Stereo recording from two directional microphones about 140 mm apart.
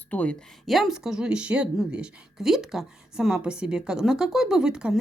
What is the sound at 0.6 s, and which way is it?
Speech, centre (ahead or behind).